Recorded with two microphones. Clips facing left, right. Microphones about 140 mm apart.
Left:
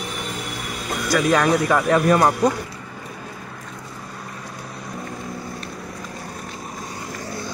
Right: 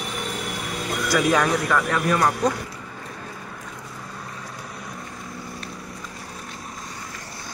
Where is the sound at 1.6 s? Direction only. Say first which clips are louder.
Left 5 dB; 30° left (ahead or behind).